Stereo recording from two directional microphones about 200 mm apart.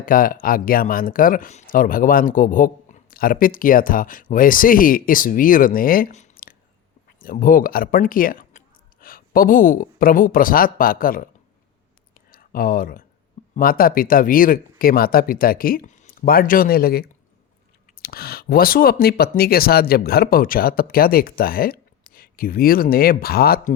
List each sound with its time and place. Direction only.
0.0 s speech: 45° left (ahead or behind)
12.3 s speech: 45° left (ahead or behind)